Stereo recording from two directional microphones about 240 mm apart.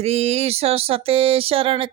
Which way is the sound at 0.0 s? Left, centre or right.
Right.